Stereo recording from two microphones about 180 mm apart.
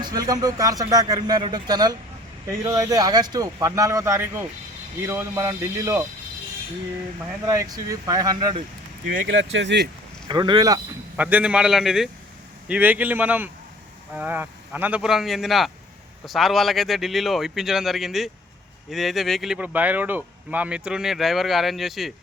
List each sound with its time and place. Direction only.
0.0 s speech: 20° right (ahead or behind)
7.4 s speech: 20° right (ahead or behind)
9.2 s speech: 90° right; by 9.9 s 75° right (ahead or behind)
10.2 s speech: 25° right (ahead or behind)
11.2 s speech: 10° right (ahead or behind)